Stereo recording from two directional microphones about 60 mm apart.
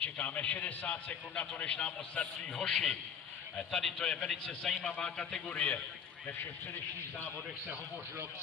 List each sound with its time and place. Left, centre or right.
0.0 s a man's voice: left
5.5 s a man's voice: left